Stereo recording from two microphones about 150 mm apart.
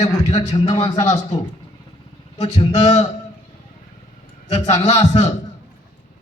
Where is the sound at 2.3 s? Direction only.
50° left (ahead or behind).